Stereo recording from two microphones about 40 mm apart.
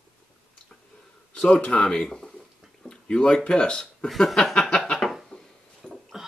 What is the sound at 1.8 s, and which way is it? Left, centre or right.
Speech, centre.